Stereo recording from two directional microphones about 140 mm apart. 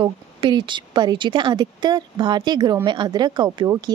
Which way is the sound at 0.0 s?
35° right (ahead or behind).